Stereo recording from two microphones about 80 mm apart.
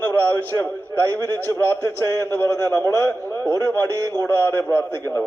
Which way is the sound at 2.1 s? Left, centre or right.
Left.